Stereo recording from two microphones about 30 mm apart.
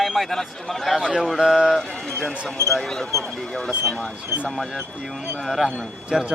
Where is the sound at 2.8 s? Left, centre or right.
Centre.